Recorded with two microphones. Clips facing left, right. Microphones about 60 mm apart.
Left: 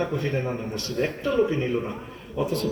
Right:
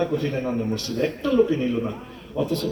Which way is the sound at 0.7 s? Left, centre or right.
Left.